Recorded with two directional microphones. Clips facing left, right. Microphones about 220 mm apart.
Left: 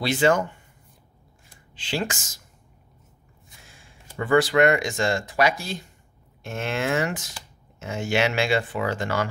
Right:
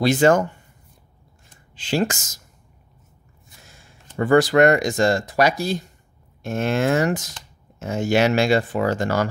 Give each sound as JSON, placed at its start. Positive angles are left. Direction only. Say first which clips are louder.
{"t": 0.0, "sound": "speech", "louder": "right 5 dB", "side_deg": -45}
{"t": 1.8, "sound": "speech", "louder": "right 6 dB", "side_deg": -45}
{"t": 3.6, "sound": "a sound", "louder": "right 2 dB", "side_deg": -40}
{"t": 4.2, "sound": "speech", "louder": "right 4 dB", "side_deg": -40}